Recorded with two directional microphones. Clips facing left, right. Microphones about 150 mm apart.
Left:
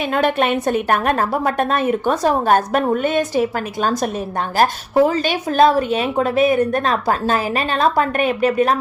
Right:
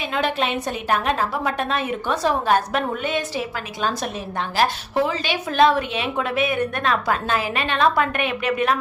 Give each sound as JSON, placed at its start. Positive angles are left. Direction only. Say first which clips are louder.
{"t": 0.1, "sound": "a woman's voice", "louder": "left 5 dB", "side_deg": 50}
{"t": 4.5, "sound": "a woman's voice", "louder": "left 6 dB", "side_deg": 45}